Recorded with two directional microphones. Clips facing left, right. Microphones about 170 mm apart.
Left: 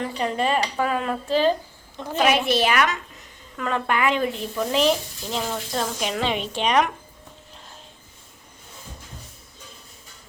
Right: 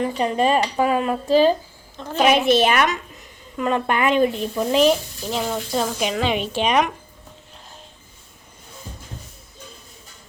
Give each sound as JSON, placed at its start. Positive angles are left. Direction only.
{"t": 0.0, "sound": "speech", "side_deg": -15}
{"t": 2.0, "sound": "a woman's voice", "side_deg": 15}
{"t": 2.3, "sound": "speech", "side_deg": -25}